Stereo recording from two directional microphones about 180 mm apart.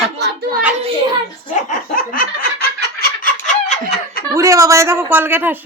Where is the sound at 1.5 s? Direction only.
50° left (ahead or behind).